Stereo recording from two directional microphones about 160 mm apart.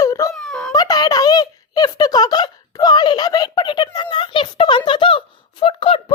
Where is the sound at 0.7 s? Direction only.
25° left (ahead or behind).